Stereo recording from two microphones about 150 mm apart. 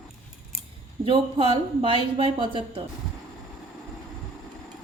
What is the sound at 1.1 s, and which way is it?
Speech, 40° right (ahead or behind).